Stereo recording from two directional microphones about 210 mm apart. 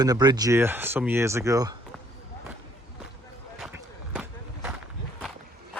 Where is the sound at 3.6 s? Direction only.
5° right (ahead or behind).